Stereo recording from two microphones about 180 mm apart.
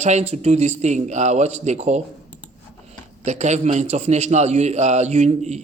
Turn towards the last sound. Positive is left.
turn(degrees=-40)  # may be behind; listen again after turning